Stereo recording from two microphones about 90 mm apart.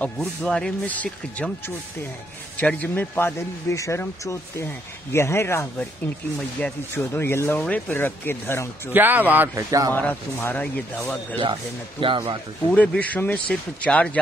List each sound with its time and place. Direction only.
0.0 s speech: 10° left (ahead or behind)
2.5 s speech: 15° left (ahead or behind)
8.9 s a man's voice: 20° right (ahead or behind)
9.6 s speech: 40° right (ahead or behind)
9.9 s speech: 20° left (ahead or behind)
12.0 s speech: 70° right (ahead or behind)
12.7 s speech: 15° left (ahead or behind)